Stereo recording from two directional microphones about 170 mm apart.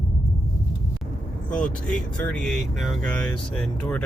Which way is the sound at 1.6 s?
5° left (ahead or behind).